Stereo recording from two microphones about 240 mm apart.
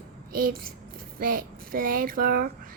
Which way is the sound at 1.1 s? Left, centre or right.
Right.